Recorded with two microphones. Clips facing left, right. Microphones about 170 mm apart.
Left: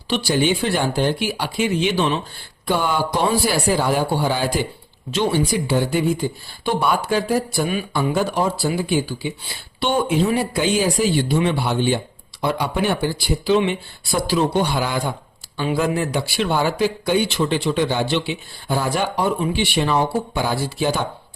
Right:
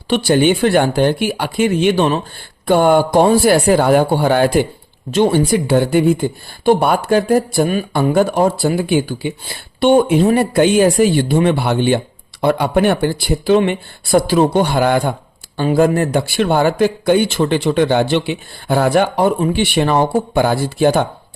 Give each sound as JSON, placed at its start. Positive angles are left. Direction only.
{"t": 0.1, "sound": "speech", "side_deg": -55}